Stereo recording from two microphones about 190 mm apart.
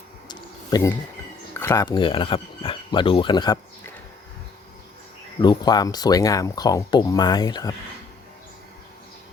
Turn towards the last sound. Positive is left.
turn(degrees=20)  # may be behind; listen again after turning